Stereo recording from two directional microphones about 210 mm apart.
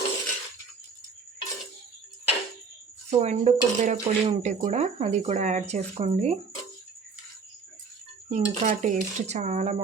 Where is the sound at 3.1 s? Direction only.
35° right (ahead or behind).